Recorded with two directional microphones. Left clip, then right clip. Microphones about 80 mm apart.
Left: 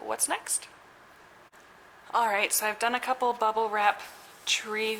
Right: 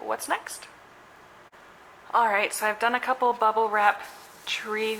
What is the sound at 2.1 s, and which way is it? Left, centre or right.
A woman's voice, left.